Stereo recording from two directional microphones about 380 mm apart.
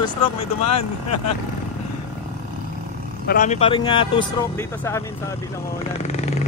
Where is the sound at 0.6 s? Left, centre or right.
Left.